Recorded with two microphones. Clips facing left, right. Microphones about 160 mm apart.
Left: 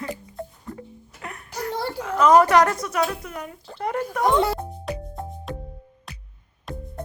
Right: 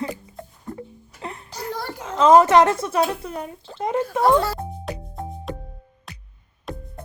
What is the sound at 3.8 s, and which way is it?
Speech, 20° right (ahead or behind).